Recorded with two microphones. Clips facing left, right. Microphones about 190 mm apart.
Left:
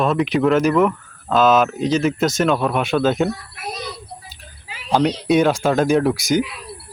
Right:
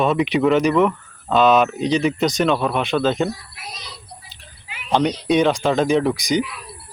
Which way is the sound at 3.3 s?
55° left (ahead or behind).